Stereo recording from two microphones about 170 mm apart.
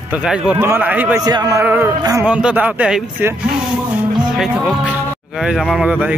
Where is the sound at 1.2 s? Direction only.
20° right (ahead or behind); by 6.1 s 5° right (ahead or behind).